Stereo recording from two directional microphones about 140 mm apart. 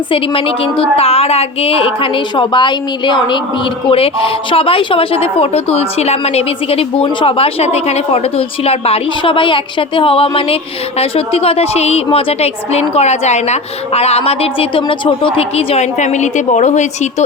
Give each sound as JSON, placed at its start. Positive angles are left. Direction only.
{"t": 0.1, "sound": "a woman's voice", "side_deg": 40}